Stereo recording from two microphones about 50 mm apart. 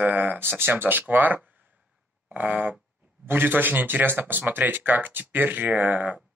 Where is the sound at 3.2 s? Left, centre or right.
Right.